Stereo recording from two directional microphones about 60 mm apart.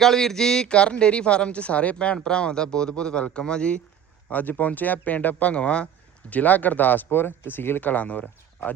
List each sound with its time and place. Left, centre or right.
0.0 s speech: centre
4.3 s speech: left